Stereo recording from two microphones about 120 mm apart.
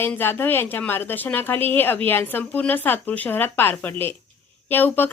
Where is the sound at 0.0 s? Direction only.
20° left (ahead or behind).